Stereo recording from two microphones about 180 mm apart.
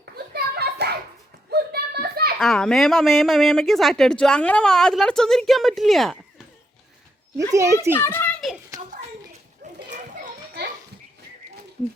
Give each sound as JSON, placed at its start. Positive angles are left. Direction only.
{"t": 0.0, "sound": "children playing", "side_deg": -60}
{"t": 1.5, "sound": "a sound", "side_deg": -65}
{"t": 2.4, "sound": "speech", "side_deg": 0}
{"t": 7.5, "sound": "a child's voice", "side_deg": -15}
{"t": 7.9, "sound": "children playing", "side_deg": 10}
{"t": 9.6, "sound": "a sound", "side_deg": -40}